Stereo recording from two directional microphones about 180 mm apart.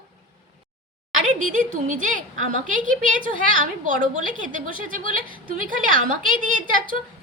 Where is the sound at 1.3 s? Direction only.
45° right (ahead or behind).